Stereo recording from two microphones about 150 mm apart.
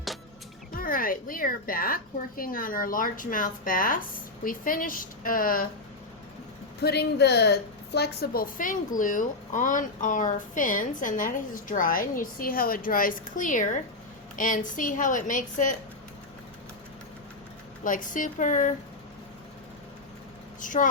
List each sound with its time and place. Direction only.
0.7 s a woman's voice: 70° left (ahead or behind)
6.8 s a woman's voice: 90° left; by 15.7 s 60° left (ahead or behind)
17.8 s speech: 60° left (ahead or behind)
20.6 s speech: 60° left (ahead or behind)